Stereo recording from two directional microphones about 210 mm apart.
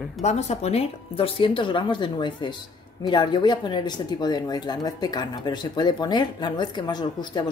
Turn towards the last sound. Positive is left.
turn(degrees=20)  # may be behind; listen again after turning